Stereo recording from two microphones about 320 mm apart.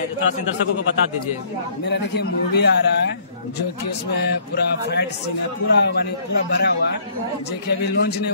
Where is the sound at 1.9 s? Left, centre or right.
Left.